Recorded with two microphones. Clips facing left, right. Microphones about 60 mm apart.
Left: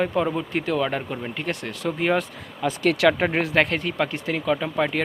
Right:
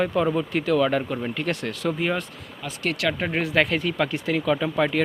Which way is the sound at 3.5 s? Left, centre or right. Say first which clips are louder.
Even; left.